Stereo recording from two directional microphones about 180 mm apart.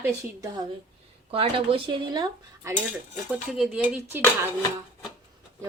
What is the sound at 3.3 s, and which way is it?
Speech, 5° right (ahead or behind).